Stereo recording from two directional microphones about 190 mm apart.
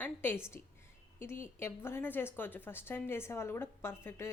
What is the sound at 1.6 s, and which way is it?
A woman's voice, 15° left (ahead or behind).